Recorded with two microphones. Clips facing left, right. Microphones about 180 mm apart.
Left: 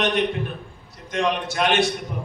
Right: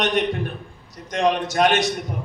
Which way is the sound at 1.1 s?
40° right (ahead or behind).